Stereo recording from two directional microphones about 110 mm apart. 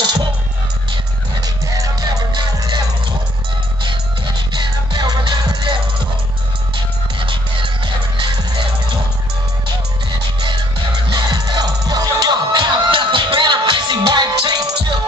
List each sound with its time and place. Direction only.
0.0 s music: 40° right (ahead or behind)
1.4 s music: 35° right (ahead or behind)
4.9 s music: 40° right (ahead or behind)
7.2 s music: 50° right (ahead or behind)
10.4 s music: 45° right (ahead or behind)